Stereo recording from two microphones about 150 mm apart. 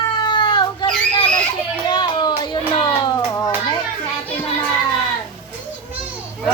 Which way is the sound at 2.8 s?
30° left (ahead or behind).